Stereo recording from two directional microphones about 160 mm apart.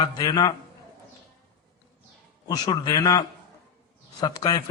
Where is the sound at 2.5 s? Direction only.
25° left (ahead or behind).